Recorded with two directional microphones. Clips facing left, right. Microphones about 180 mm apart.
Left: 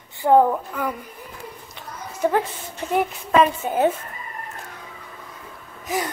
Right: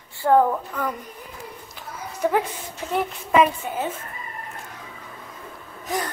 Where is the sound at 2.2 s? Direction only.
5° right (ahead or behind).